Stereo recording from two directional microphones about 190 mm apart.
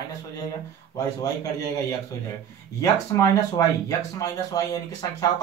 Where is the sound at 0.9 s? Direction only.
20° left (ahead or behind).